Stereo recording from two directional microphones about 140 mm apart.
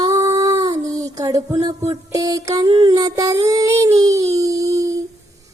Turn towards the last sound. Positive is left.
turn(degrees=-25)  # may be behind; listen again after turning